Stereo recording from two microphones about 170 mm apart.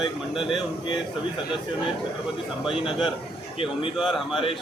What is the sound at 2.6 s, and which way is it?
Speech, 5° right (ahead or behind).